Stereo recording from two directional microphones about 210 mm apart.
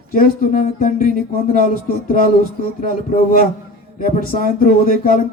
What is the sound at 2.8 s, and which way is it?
Speech, 40° left (ahead or behind).